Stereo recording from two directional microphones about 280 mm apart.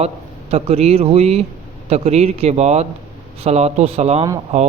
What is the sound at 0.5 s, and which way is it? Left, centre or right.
A man's voice, right.